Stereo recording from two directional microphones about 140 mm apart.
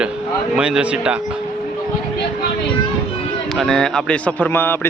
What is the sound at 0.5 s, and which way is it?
Speech, 5° right (ahead or behind).